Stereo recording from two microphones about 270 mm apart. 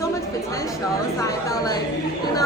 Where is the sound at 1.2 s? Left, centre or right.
Centre.